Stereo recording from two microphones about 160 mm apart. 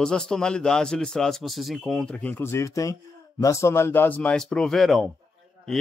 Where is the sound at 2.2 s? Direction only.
10° left (ahead or behind).